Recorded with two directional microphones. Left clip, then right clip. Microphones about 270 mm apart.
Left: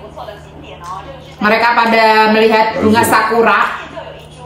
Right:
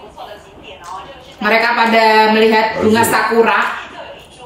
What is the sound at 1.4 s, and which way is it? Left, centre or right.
A woman's voice, centre.